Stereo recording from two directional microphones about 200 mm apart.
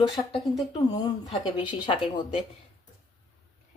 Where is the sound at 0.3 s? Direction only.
25° left (ahead or behind).